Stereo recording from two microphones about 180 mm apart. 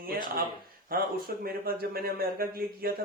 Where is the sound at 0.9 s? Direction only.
55° right (ahead or behind).